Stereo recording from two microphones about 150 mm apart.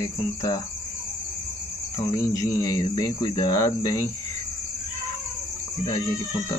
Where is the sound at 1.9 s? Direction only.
20° left (ahead or behind).